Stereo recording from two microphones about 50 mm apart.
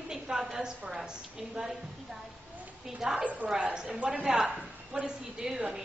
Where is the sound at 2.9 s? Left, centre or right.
Centre.